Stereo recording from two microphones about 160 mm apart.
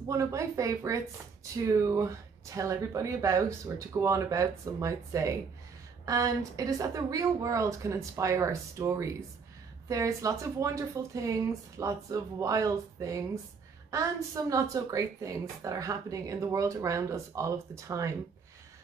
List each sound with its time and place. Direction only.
0.1 s a woman's voice: 20° right (ahead or behind)